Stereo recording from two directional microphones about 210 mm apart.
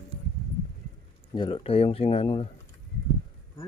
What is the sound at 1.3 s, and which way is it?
Speech, 25° left (ahead or behind).